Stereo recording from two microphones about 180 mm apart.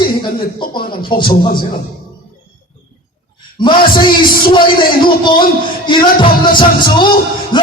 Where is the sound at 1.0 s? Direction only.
25° left (ahead or behind).